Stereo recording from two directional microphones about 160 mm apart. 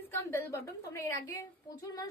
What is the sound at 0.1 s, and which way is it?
A woman's voice, 15° left (ahead or behind).